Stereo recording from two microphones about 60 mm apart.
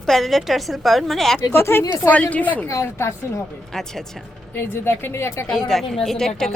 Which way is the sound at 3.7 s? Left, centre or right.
Centre.